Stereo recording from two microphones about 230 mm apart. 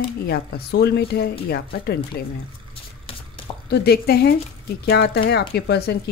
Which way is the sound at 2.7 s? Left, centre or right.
Left.